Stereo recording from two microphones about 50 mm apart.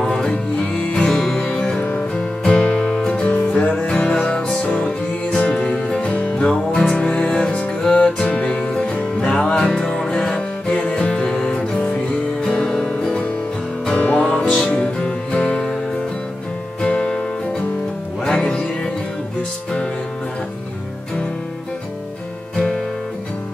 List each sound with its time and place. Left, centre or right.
0.0 s music: centre
1.8 s music: left
2.1 s music: centre
6.0 s music: left
6.4 s music: centre
6.8 s music: left
13.9 s music: left
16.8 s music: left